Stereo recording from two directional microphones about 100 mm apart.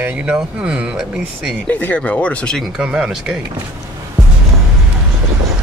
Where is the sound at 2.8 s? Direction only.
10° right (ahead or behind).